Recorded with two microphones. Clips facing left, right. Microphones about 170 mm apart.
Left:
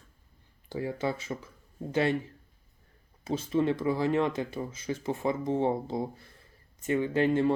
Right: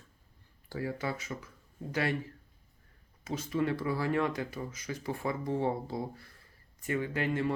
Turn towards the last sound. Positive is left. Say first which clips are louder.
# left 7 dB
turn(degrees=30)  # may be behind; listen again after turning